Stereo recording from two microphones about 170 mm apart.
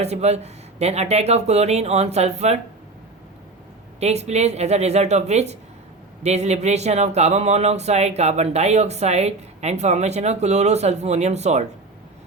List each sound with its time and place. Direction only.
0.0 s speech: 40° right (ahead or behind)
4.0 s speech: 40° right (ahead or behind)